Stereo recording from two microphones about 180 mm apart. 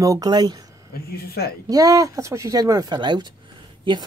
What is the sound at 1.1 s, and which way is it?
Speech, 60° left (ahead or behind).